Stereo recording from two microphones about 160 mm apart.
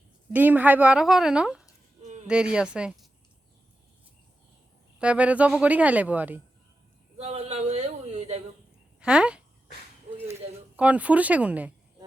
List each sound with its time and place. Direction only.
0.3 s speech: 10° right (ahead or behind)
2.0 s a sound: 45° right (ahead or behind)
2.2 s speech: 5° right (ahead or behind)
4.9 s speech: 10° right (ahead or behind)
7.2 s a sound: 40° right (ahead or behind)
9.0 s speech: 5° right (ahead or behind)
10.8 s speech: 10° right (ahead or behind)